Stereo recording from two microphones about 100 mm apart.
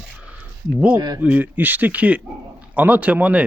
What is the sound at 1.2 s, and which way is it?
Speech, 15° right (ahead or behind).